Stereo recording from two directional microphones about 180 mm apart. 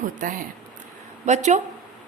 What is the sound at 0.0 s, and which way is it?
A woman's voice, 50° right (ahead or behind).